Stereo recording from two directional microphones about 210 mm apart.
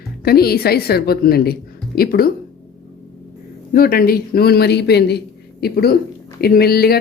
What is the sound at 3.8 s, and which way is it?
Speech, 45° left (ahead or behind).